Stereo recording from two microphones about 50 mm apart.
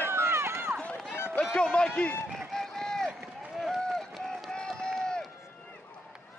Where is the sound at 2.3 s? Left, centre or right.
Centre.